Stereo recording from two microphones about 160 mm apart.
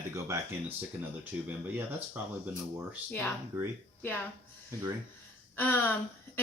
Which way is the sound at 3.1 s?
15° left (ahead or behind).